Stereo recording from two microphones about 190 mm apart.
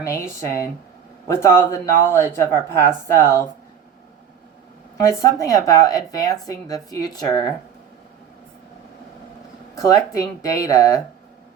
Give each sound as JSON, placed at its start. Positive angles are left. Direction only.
{"t": 0.0, "sound": "speech", "side_deg": 15}
{"t": 5.2, "sound": "speech", "side_deg": 15}
{"t": 9.7, "sound": "speech", "side_deg": 15}